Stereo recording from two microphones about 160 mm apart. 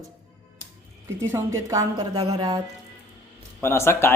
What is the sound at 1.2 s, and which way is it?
Speech, 20° right (ahead or behind).